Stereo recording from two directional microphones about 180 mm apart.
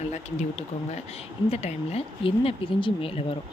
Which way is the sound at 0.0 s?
40° left (ahead or behind).